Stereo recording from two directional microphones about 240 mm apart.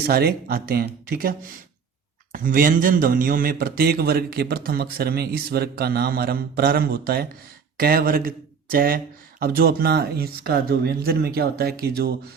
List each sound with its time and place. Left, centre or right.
0.0 s a man's voice: right